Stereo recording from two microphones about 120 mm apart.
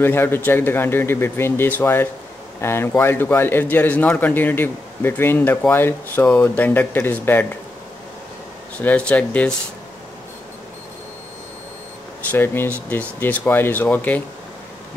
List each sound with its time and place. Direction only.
0.0 s a man's voice: 20° left (ahead or behind)
8.7 s speech: 10° left (ahead or behind)
12.3 s speech: 15° left (ahead or behind)